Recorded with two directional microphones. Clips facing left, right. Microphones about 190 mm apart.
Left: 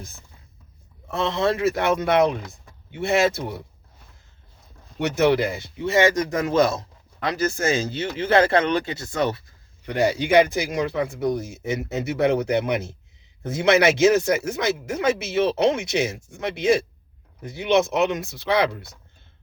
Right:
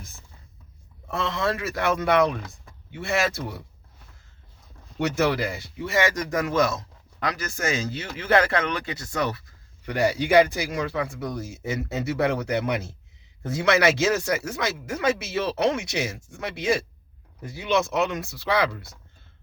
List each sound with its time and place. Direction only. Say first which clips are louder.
1.1 s a man's voice: left 4 dB; 25° left (ahead or behind)
4.9 s a man's voice: left 4 dB; 25° left (ahead or behind)